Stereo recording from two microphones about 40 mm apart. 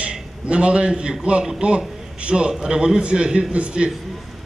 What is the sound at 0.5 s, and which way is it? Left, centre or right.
A man's voice, right.